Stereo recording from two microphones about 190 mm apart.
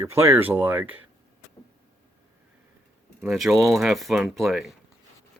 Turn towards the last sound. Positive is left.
turn(degrees=0)  # may be behind; listen again after turning